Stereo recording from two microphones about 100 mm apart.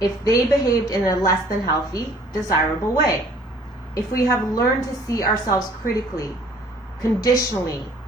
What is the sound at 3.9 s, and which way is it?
A woman's voice, 35° left (ahead or behind).